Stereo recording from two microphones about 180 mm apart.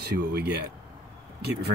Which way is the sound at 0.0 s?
60° right (ahead or behind).